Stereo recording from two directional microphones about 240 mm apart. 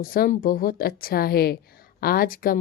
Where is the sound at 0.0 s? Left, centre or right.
Left.